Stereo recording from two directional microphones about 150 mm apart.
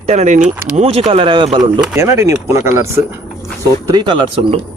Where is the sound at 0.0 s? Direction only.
50° right (ahead or behind).